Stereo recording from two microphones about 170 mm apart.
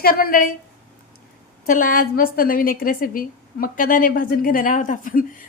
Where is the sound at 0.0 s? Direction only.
60° left (ahead or behind).